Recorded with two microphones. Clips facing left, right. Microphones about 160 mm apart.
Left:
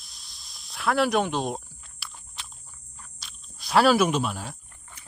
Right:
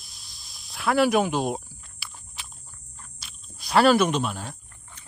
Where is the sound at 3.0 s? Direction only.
5° right (ahead or behind).